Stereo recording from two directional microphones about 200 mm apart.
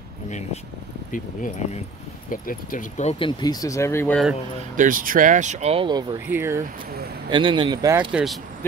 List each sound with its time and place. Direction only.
1.1 s speech: 40° left (ahead or behind); by 4.2 s 10° left (ahead or behind)
4.7 s speech: 45° right (ahead or behind); by 6.0 s 25° right (ahead or behind)
6.3 s speech: 10° right (ahead or behind)
7.2 s speech: 25° right (ahead or behind)
8.1 s speech: 5° right (ahead or behind)